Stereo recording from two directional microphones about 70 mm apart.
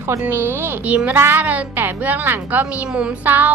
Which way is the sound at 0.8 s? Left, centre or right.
Right.